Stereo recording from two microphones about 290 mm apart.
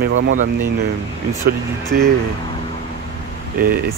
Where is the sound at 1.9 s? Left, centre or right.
Right.